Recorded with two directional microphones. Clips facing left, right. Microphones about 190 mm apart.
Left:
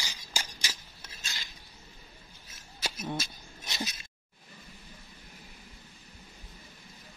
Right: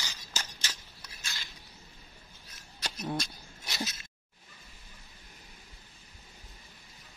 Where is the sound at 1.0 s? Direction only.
20° left (ahead or behind).